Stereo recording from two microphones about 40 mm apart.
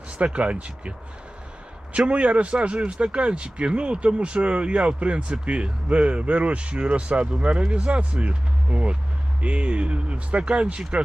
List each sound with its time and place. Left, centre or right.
0.2 s a man's voice: right